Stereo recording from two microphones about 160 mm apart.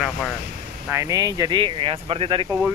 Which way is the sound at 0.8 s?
20° right (ahead or behind).